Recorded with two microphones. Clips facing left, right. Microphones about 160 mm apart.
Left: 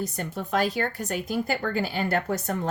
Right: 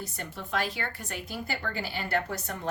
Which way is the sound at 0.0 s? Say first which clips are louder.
Left 8 dB; 45° left (ahead or behind).